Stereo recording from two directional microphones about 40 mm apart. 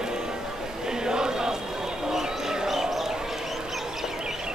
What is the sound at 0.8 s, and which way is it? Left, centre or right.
Chant, centre.